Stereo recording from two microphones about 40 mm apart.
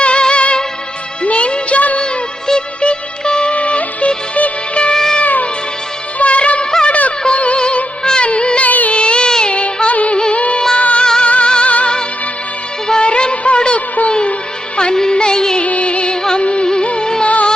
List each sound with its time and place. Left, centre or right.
0.0 s music: left
2.0 s music of bollywood: left
3.5 s music: left
8.6 s music: left
8.9 s music: left
10.2 s music: left
11.0 s music: centre
12.9 s music of bollywood: left
14.1 s music: left
15.6 s music: left
17.2 s music: left